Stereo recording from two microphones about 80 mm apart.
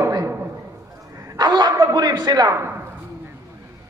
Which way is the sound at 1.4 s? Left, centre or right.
Right.